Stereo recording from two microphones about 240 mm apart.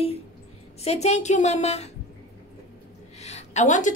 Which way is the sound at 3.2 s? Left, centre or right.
Left.